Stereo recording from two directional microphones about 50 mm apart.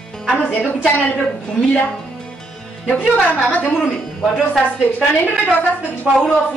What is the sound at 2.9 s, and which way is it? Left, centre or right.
Speech, left.